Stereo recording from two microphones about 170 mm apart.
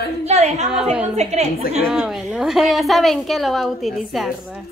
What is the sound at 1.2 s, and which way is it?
Speech, 40° right (ahead or behind).